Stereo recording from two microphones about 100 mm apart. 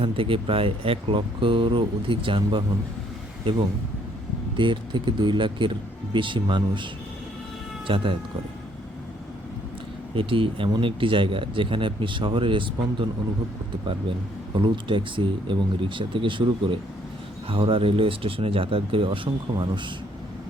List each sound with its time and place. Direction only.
0.0 s speech: 65° right (ahead or behind)
4.5 s speech: 55° right (ahead or behind)
7.9 s speech: 60° right (ahead or behind)
10.2 s speech: 60° right (ahead or behind)
14.5 s speech: 55° right (ahead or behind)